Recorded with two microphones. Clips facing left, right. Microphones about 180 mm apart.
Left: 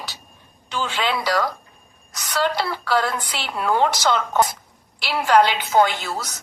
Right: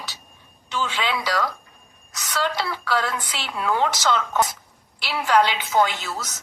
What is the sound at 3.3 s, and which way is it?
Speech, 50° left (ahead or behind).